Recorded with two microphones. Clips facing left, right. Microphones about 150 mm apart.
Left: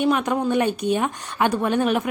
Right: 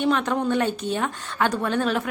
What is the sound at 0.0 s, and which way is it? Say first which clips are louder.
A woman's voice: left 2 dB; 10° left (ahead or behind).